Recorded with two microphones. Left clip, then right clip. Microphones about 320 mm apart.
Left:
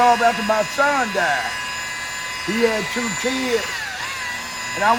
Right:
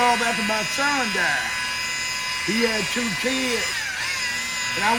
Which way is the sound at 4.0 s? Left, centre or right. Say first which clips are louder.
Right 1 dB; centre.